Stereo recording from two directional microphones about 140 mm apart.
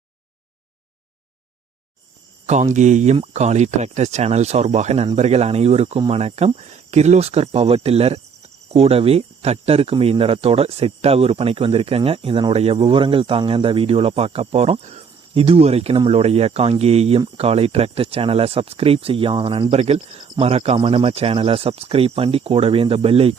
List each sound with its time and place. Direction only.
2.5 s speech: 55° right (ahead or behind)